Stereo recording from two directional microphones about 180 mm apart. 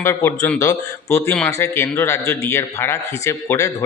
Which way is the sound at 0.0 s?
15° left (ahead or behind).